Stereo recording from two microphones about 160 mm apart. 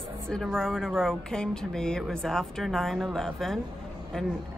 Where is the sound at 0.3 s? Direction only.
5° left (ahead or behind).